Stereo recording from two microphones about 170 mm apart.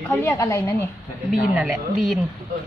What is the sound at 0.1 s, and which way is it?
Speech, 15° left (ahead or behind).